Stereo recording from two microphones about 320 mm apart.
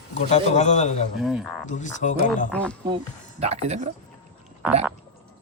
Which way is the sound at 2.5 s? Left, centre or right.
Centre.